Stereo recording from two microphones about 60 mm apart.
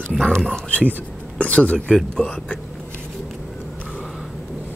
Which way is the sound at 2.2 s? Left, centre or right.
Left.